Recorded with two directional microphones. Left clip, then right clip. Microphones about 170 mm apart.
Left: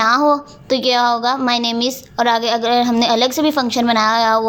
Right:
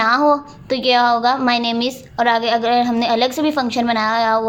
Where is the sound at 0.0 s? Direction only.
25° left (ahead or behind).